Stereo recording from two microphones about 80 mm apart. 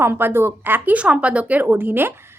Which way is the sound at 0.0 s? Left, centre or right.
Right.